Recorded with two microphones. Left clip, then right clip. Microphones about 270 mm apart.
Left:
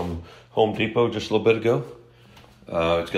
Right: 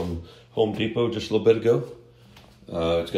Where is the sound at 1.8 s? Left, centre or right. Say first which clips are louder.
Right 2 dB; centre.